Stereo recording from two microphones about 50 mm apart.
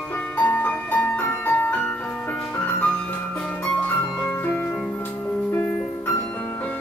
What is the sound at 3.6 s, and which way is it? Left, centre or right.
Music, left.